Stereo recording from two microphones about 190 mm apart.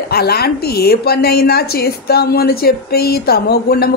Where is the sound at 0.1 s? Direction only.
55° left (ahead or behind).